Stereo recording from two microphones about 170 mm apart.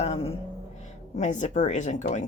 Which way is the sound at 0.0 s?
35° left (ahead or behind).